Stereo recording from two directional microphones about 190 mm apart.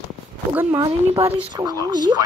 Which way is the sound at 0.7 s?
25° right (ahead or behind).